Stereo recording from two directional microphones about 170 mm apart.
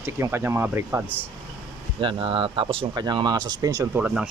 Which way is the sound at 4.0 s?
5° right (ahead or behind).